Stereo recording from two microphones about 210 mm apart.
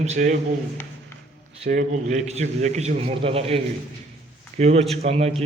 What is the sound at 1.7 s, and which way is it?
A man's voice, 35° right (ahead or behind).